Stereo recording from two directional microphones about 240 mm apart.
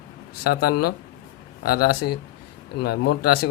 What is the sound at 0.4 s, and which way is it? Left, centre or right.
Speech, left.